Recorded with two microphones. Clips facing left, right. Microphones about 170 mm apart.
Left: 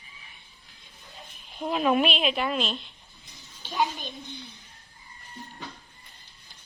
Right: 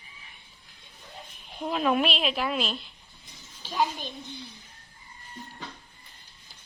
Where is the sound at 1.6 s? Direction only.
Centre (ahead or behind).